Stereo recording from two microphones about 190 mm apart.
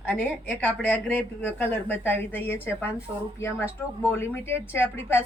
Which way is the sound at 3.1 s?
15° right (ahead or behind).